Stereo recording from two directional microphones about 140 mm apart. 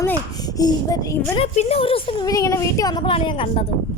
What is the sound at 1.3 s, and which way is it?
Speech, 45° left (ahead or behind).